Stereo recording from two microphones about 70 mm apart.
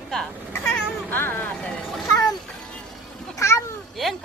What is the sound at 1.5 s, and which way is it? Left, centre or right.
Speech, centre.